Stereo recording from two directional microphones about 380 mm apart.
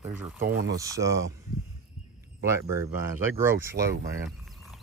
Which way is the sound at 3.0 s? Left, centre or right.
Centre.